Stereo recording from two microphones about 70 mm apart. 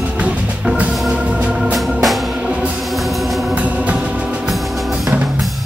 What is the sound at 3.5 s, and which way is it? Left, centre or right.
Music, centre.